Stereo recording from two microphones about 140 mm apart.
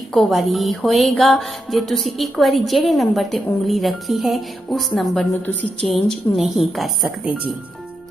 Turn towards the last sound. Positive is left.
turn(degrees=-5)  # may be behind; listen again after turning